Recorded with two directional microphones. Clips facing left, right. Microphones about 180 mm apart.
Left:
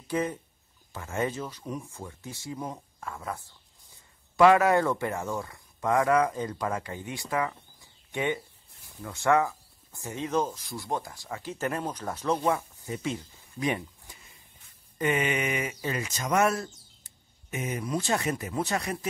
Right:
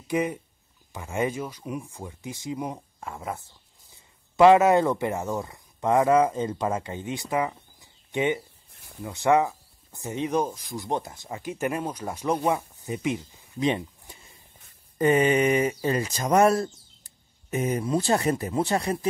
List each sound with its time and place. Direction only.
0.1 s speech: 15° right (ahead or behind)